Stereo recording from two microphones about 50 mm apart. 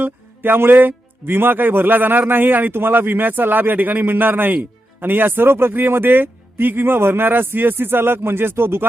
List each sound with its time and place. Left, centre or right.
0.0 s a man's voice: right